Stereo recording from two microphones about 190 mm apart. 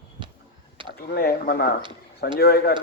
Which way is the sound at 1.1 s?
55° left (ahead or behind).